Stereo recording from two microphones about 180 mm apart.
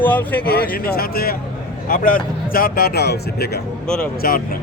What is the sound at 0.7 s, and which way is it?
Speech, 55° left (ahead or behind).